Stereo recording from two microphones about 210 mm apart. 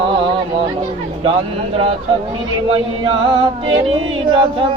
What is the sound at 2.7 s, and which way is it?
Music, 25° right (ahead or behind).